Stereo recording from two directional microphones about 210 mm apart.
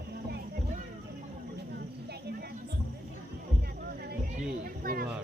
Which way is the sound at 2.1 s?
50° right (ahead or behind).